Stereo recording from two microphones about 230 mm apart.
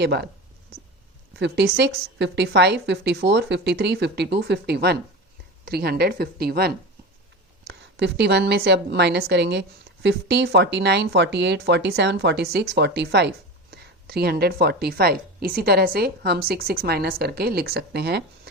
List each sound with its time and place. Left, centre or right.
0.0 s a woman's voice: right
1.4 s a woman's voice: right